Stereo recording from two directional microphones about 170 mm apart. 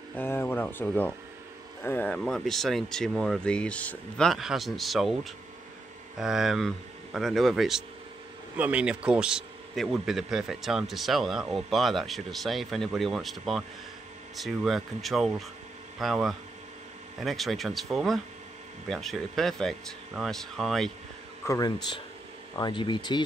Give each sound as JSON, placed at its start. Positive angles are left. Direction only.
{"t": 0.1, "sound": "a man's voice", "side_deg": 10}
{"t": 21.5, "sound": "speech", "side_deg": 20}